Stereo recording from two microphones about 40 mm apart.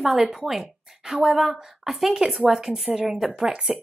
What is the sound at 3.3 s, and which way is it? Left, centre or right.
Speech, right.